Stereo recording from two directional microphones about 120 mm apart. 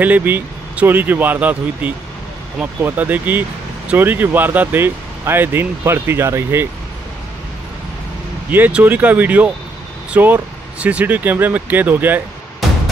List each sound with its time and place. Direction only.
0.0 s speech: 15° right (ahead or behind)
8.5 s speech: 15° right (ahead or behind)